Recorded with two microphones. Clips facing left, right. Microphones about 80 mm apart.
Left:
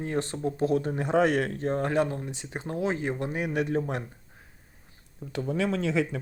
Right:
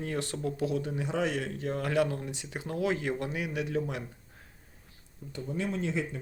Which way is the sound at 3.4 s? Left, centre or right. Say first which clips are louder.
Left 4 dB; left.